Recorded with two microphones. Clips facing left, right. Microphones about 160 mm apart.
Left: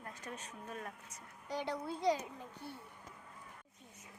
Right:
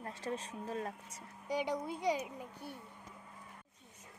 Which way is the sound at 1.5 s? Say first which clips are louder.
Right 3 dB; 15° right (ahead or behind).